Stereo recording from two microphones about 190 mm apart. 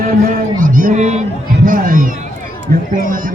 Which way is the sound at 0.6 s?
45° right (ahead or behind).